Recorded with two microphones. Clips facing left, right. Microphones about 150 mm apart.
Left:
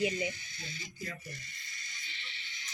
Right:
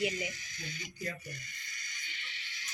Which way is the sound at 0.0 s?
30° left (ahead or behind).